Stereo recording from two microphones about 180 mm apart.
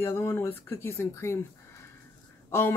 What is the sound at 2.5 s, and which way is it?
Speech, 15° left (ahead or behind).